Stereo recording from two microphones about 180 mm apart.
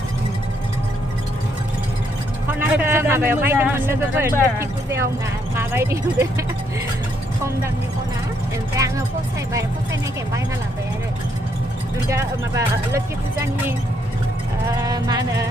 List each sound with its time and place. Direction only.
2.6 s a man's voice: 10° right (ahead or behind)
8.7 s speech: 20° right (ahead or behind)
12.0 s speech: 15° right (ahead or behind)
14.7 s music: 20° right (ahead or behind)